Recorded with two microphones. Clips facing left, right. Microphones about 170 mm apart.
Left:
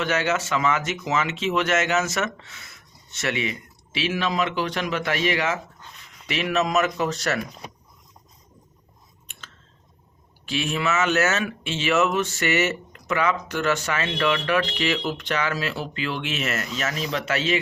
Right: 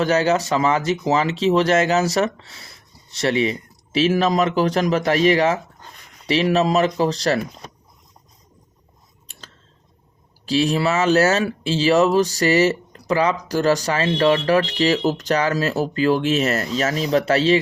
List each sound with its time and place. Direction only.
0.0 s speech: 35° right (ahead or behind)
9.2 s scissors: 35° right (ahead or behind)
10.4 s speech: 35° right (ahead or behind)